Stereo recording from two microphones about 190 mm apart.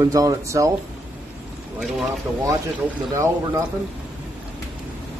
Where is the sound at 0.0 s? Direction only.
20° right (ahead or behind).